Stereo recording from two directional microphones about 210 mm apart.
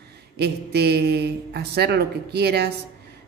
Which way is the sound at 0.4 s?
50° right (ahead or behind).